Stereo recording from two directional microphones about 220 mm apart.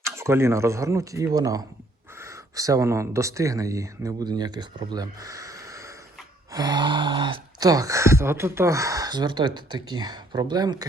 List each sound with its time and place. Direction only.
0.0 s speech: 10° right (ahead or behind)